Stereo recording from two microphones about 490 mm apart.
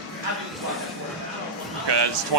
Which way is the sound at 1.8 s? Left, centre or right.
Right.